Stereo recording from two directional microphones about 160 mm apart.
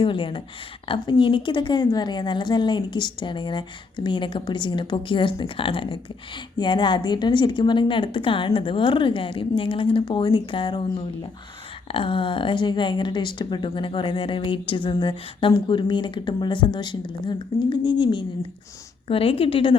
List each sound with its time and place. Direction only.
0.0 s a woman's voice: 30° left (ahead or behind)